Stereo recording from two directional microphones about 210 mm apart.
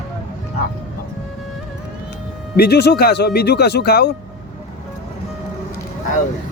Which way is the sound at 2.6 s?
50° left (ahead or behind).